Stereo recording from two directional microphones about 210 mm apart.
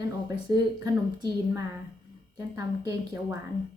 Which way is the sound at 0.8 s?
15° right (ahead or behind).